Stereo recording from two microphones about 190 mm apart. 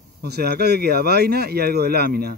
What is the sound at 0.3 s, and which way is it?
Speech, 55° right (ahead or behind).